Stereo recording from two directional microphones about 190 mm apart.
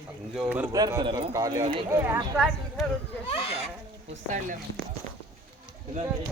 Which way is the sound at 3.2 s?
30° left (ahead or behind).